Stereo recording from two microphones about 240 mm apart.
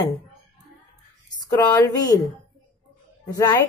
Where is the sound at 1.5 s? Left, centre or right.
Centre.